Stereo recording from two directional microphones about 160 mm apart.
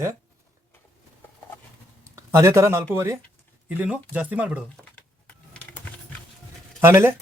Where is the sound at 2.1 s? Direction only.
20° right (ahead or behind).